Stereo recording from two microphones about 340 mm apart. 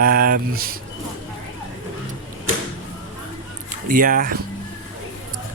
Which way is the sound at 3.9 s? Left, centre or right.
Right.